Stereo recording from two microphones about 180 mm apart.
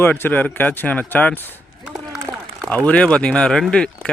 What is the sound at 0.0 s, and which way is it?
Speech, 10° left (ahead or behind).